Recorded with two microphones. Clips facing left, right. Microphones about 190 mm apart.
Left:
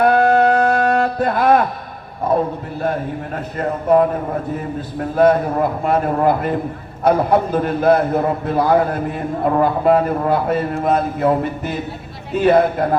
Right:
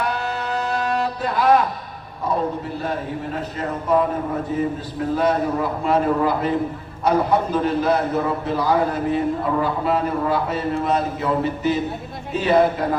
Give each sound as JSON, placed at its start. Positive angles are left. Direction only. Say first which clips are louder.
{"t": 0.0, "sound": "music", "louder": "left 12 dB", "side_deg": 55}
{"t": 2.2, "sound": "a man's voice", "louder": "left 4 dB", "side_deg": 50}
{"t": 5.1, "sound": "a man's voice", "louder": "left 6 dB", "side_deg": 55}